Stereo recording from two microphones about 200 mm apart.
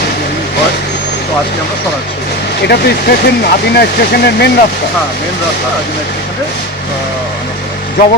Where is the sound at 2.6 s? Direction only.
55° left (ahead or behind).